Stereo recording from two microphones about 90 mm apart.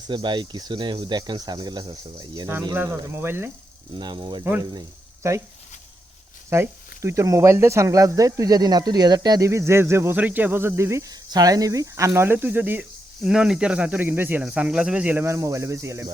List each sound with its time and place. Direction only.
0.1 s speech: 60° right (ahead or behind)
2.7 s speech: 25° right (ahead or behind)
3.9 s speech: 60° right (ahead or behind)
5.2 s speech: 35° right (ahead or behind)
6.5 s speech: 30° right (ahead or behind); by 9.5 s 45° right (ahead or behind)
9.5 s speech: 30° right (ahead or behind)
10.2 s speech: 15° right (ahead or behind)
11.1 s speech: 45° right (ahead or behind); by 12.8 s 20° right (ahead or behind)
13.2 s speech: 5° right (ahead or behind)
14.0 s speech: 20° right (ahead or behind)
15.3 s speech: 35° right (ahead or behind)